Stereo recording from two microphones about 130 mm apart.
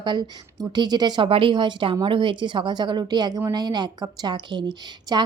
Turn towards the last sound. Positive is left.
turn(degrees=-35)  # may be behind; listen again after turning